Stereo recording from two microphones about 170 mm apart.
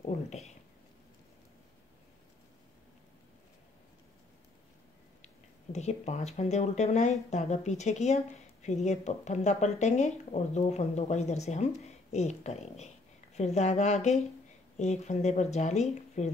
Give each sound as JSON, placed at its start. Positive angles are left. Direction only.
{"t": 0.0, "sound": "speech", "side_deg": 40}
{"t": 5.2, "sound": "speech", "side_deg": 40}